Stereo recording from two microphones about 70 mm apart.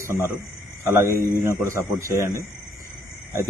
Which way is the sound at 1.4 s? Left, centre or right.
Right.